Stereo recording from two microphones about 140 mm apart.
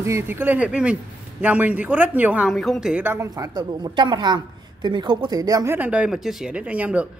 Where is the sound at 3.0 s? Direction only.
15° right (ahead or behind).